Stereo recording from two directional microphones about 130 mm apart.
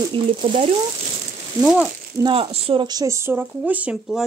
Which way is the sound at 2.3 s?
40° right (ahead or behind).